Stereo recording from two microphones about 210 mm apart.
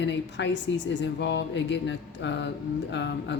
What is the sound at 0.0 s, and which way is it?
Speech, 60° left (ahead or behind).